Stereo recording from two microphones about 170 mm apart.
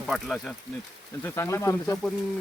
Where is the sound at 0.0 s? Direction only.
Centre (ahead or behind).